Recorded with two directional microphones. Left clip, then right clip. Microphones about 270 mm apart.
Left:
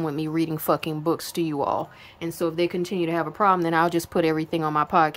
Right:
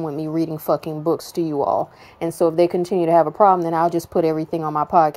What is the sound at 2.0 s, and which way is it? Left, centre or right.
A woman's voice, centre.